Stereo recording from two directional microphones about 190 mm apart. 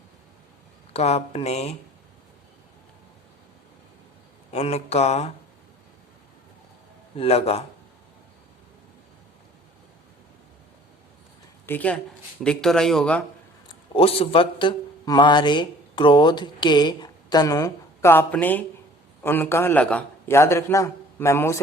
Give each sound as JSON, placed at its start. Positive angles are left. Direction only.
{"t": 0.9, "sound": "speech", "side_deg": 35}
{"t": 4.5, "sound": "speech", "side_deg": 35}
{"t": 7.2, "sound": "speech", "side_deg": 30}
{"t": 11.6, "sound": "speech", "side_deg": 10}
{"t": 13.9, "sound": "a man's voice", "side_deg": 30}